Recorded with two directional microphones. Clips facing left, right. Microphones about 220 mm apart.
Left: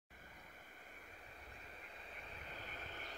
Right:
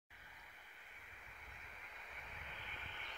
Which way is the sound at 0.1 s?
45° left (ahead or behind).